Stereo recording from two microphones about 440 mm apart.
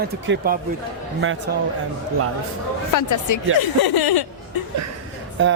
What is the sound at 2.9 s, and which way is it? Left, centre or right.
Speech, left.